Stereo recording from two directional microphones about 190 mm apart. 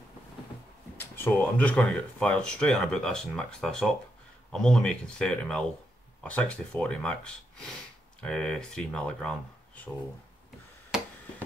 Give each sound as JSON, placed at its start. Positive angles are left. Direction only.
{"t": 0.9, "sound": "speech", "side_deg": 10}